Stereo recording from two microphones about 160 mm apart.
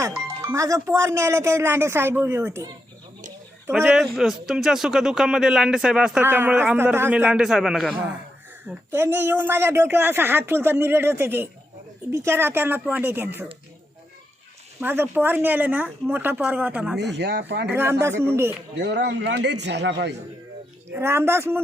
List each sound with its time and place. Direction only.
0.0 s a woman's voice: 15° right (ahead or behind)
3.8 s speech: centre (ahead or behind)
8.6 s a woman's voice: 15° right (ahead or behind)
14.8 s a woman's voice: 15° right (ahead or behind)
17.0 s a man's voice: 90° right
17.7 s a woman's voice: 15° right (ahead or behind)
18.8 s a man's voice: 90° right
20.9 s a woman's voice: 15° right (ahead or behind)